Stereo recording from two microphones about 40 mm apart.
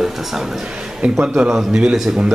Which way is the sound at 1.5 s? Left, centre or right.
Centre.